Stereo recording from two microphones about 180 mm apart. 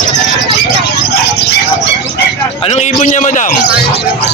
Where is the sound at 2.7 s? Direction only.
40° left (ahead or behind).